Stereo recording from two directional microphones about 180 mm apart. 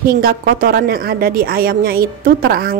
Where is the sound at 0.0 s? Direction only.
55° right (ahead or behind).